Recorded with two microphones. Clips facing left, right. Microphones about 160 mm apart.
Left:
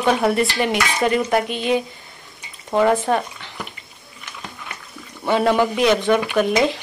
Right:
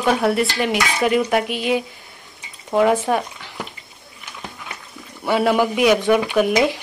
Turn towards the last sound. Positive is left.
turn(degrees=-10)  # may be behind; listen again after turning